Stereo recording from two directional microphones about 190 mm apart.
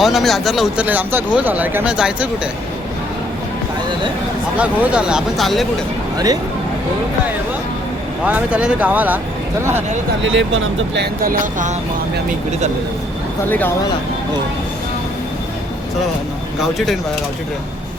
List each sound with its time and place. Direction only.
0.0 s speech: centre (ahead or behind)
4.5 s speech: 5° right (ahead or behind)
8.2 s speech: 5° right (ahead or behind)
10.2 s speech: 90° right; by 11.7 s 50° right (ahead or behind)
12.5 s speech: 35° right (ahead or behind)
13.5 s speech: 10° left (ahead or behind)
16.6 s speech: centre (ahead or behind)